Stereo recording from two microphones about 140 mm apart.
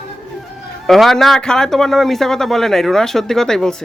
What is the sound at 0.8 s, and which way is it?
Speech, centre (ahead or behind).